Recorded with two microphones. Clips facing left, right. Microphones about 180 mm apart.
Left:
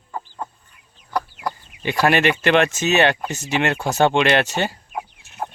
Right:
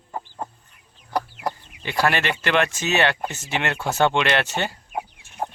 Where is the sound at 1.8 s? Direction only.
15° left (ahead or behind).